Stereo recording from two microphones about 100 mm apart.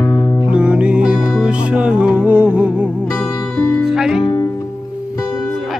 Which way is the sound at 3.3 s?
30° left (ahead or behind).